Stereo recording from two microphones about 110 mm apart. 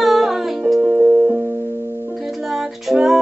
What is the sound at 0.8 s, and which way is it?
Music, 15° right (ahead or behind).